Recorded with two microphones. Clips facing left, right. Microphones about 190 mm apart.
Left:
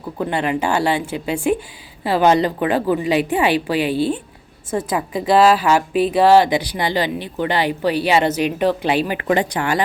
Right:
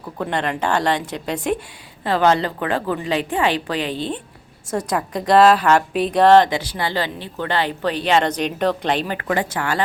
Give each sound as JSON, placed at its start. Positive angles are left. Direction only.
{"t": 0.2, "sound": "a woman's voice", "side_deg": 5}
{"t": 9.1, "sound": "speech", "side_deg": 20}